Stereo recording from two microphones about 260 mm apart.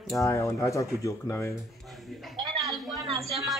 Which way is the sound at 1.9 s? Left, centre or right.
Centre.